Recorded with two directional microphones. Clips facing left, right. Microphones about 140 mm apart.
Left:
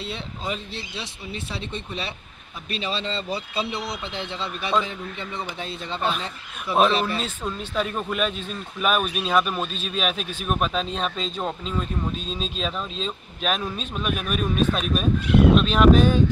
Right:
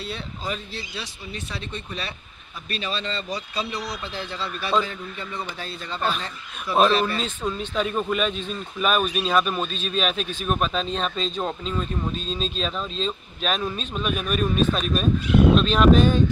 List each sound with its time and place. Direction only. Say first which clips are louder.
0.0 s speech: even; 25° left (ahead or behind)
6.0 s speech: even; 5° left (ahead or behind)
6.9 s speech: right 2 dB; 20° left (ahead or behind)
7.4 s speech: right 2 dB; centre (ahead or behind)